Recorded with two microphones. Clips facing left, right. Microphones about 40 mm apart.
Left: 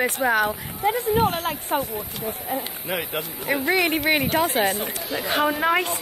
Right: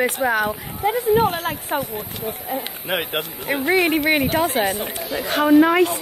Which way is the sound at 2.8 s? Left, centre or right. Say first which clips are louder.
Right 6 dB; right.